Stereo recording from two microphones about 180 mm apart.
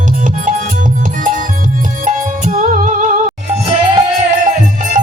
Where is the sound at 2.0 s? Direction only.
45° right (ahead or behind).